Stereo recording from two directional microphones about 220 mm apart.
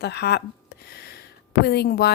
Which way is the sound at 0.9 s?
45° left (ahead or behind).